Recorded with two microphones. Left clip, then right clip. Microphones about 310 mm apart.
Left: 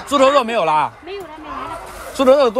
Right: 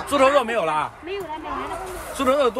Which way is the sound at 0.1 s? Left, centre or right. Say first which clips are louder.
Left 4 dB; centre.